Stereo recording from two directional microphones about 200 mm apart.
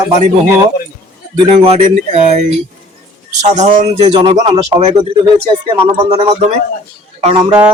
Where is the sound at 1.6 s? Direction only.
35° right (ahead or behind).